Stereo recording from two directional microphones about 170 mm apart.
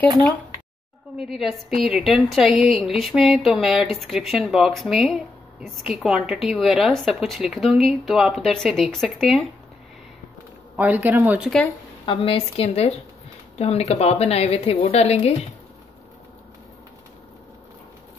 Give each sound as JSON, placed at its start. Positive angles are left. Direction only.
{"t": 1.1, "sound": "a woman's voice", "side_deg": 0}
{"t": 10.8, "sound": "speech", "side_deg": -10}
{"t": 12.1, "sound": "a woman's voice", "side_deg": 35}